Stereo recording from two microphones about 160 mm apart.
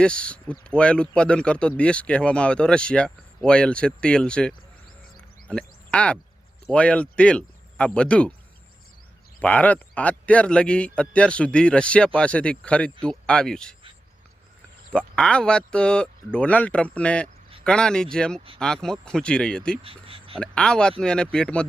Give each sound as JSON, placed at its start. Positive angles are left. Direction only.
{"t": 0.0, "sound": "speech", "side_deg": 5}
{"t": 5.5, "sound": "frog", "side_deg": 5}
{"t": 6.7, "sound": "speech", "side_deg": 5}
{"t": 9.4, "sound": "speech", "side_deg": 10}
{"t": 14.9, "sound": "speech", "side_deg": 5}
{"t": 19.8, "sound": "a sound", "side_deg": -35}
{"t": 20.4, "sound": "speech", "side_deg": 5}